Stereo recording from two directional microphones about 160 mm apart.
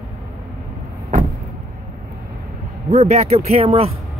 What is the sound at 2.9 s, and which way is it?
Speech, 45° right (ahead or behind).